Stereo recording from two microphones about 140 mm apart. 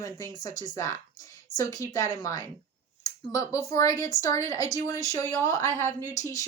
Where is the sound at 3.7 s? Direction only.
25° left (ahead or behind).